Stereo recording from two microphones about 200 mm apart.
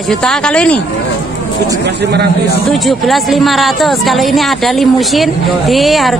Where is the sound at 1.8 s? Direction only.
55° right (ahead or behind).